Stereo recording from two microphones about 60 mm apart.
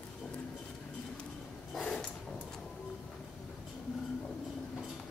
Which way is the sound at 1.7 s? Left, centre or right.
Centre.